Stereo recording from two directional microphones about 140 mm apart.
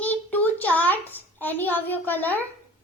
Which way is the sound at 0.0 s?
10° left (ahead or behind).